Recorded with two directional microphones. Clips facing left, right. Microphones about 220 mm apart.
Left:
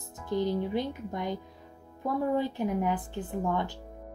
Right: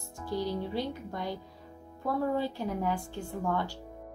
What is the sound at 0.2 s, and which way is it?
Speech, 20° left (ahead or behind).